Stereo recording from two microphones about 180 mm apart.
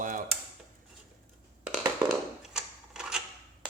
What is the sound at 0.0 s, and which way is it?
Dishes, 50° right (ahead or behind).